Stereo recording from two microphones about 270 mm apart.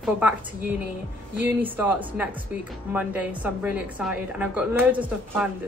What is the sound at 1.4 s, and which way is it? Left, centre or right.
A woman's voice, centre.